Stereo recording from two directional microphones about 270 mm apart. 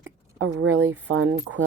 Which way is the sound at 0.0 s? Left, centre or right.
Right.